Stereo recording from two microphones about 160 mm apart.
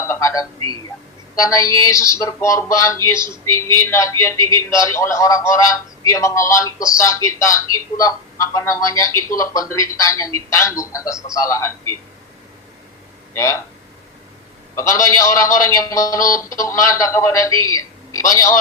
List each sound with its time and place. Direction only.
0.1 s telephone: 20° left (ahead or behind)
1.4 s speech: 20° left (ahead or behind)
13.3 s speech: 20° left (ahead or behind)
14.8 s speech: 20° left (ahead or behind)